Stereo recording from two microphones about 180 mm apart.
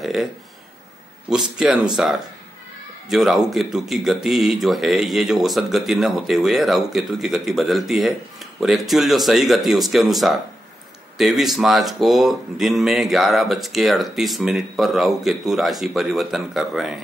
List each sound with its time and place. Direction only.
0.0 s speech: centre (ahead or behind)
1.3 s speech: 5° right (ahead or behind)